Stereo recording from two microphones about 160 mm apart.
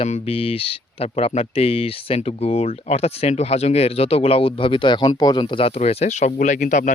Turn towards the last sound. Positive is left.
turn(degrees=55)  # may be behind; listen again after turning